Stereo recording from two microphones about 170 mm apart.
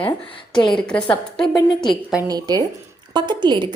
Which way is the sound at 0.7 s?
5° left (ahead or behind).